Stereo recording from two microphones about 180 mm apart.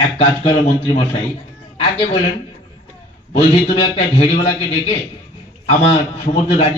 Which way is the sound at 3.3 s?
35° left (ahead or behind).